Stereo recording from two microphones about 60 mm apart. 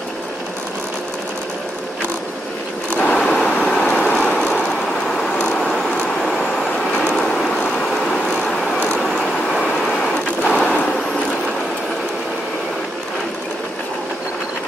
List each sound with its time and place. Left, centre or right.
3.0 s vehicle: centre
5.7 s vehicle: centre
7.0 s vehicle: centre
10.4 s a sound: centre